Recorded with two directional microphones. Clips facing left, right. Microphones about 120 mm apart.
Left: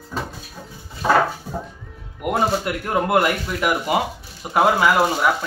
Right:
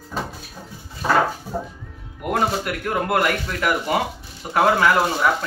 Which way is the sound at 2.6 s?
20° left (ahead or behind).